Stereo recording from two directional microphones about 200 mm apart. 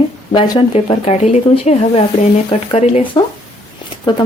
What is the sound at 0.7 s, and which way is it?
A woman's voice, 30° left (ahead or behind).